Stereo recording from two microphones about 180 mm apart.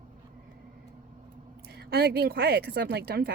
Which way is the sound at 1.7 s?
65° right (ahead or behind).